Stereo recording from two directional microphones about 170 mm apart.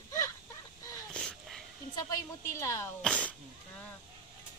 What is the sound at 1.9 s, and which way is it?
Speech, 20° left (ahead or behind).